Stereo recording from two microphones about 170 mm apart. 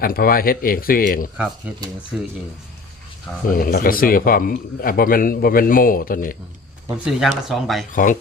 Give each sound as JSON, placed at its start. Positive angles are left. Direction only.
{"t": 0.0, "sound": "speech", "side_deg": 60}
{"t": 1.7, "sound": "speech", "side_deg": -10}
{"t": 3.4, "sound": "speech", "side_deg": 55}
{"t": 7.0, "sound": "speech", "side_deg": 0}